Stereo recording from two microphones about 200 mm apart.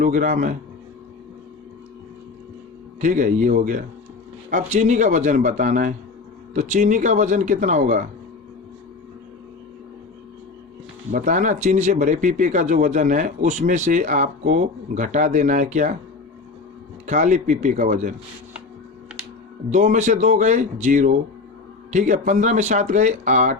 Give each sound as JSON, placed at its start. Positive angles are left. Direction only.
{"t": 0.0, "sound": "speech", "side_deg": -40}
{"t": 3.0, "sound": "a man's voice", "side_deg": -40}
{"t": 11.1, "sound": "speech", "side_deg": -40}
{"t": 17.1, "sound": "speech", "side_deg": -40}
{"t": 19.7, "sound": "speech", "side_deg": -40}